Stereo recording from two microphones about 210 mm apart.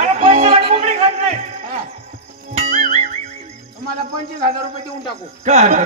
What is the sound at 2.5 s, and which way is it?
Music, 30° right (ahead or behind).